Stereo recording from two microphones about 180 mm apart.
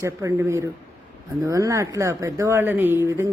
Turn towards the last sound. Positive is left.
turn(degrees=-15)  # may be behind; listen again after turning